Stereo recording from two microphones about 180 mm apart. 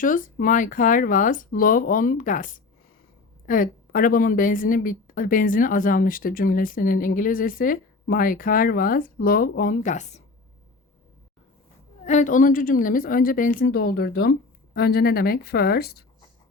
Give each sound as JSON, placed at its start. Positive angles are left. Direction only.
{"t": 0.0, "sound": "a woman's voice", "side_deg": 50}
{"t": 12.0, "sound": "a woman's voice", "side_deg": 40}